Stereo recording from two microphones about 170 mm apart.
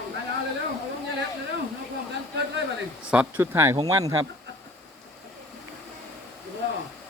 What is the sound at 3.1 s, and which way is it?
Speech, 10° right (ahead or behind).